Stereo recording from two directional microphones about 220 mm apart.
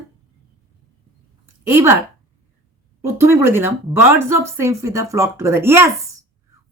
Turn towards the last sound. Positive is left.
turn(degrees=-10)  # may be behind; listen again after turning